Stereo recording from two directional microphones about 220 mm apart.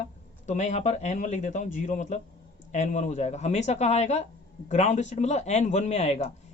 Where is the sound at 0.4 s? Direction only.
30° left (ahead or behind).